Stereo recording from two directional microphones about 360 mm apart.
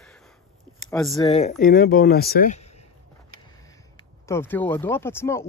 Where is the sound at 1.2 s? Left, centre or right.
Centre.